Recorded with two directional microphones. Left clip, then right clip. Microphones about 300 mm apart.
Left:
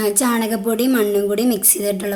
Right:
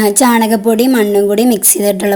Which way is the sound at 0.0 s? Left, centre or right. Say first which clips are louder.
Right 8 dB; centre.